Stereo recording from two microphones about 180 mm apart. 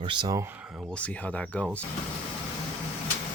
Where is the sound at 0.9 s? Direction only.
10° left (ahead or behind).